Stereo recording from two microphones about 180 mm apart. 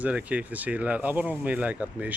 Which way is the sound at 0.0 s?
10° right (ahead or behind).